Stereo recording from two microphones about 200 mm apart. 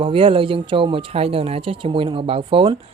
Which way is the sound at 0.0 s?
25° right (ahead or behind).